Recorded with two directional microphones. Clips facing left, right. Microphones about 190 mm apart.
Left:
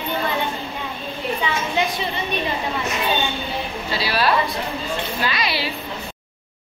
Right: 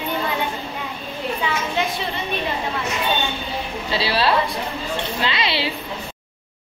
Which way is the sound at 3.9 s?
30° right (ahead or behind).